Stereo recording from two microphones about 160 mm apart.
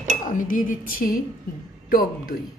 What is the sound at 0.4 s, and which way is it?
Speech, 55° left (ahead or behind).